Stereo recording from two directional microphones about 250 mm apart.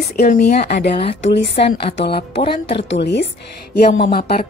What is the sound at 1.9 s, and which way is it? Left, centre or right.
A woman's voice, left.